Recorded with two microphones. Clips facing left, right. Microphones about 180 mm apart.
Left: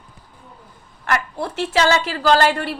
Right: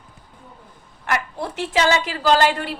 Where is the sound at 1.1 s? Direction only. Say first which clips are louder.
Left 2 dB; 15° right (ahead or behind).